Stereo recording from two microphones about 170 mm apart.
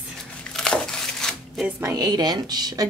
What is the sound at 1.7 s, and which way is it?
A woman's voice, 15° right (ahead or behind).